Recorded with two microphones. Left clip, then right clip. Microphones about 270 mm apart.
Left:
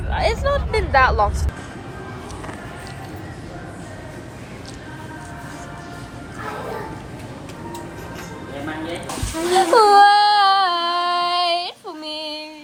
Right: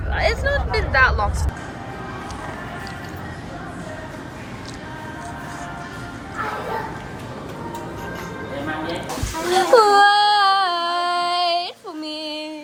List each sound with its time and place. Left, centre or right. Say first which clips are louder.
0.1 s vehicle: even; left
0.9 s speech: left 2 dB; centre
9.5 s a sound: left 1 dB; centre